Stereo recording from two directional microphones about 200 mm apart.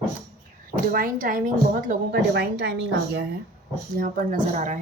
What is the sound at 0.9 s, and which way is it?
A woman's voice, 45° right (ahead or behind).